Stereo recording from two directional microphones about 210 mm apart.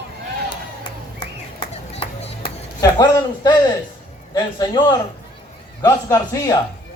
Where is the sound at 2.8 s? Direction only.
20° left (ahead or behind).